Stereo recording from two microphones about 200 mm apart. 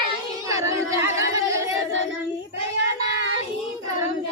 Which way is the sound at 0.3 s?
15° right (ahead or behind).